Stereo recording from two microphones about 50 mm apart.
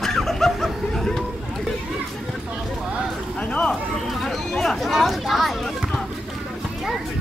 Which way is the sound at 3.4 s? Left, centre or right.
Left.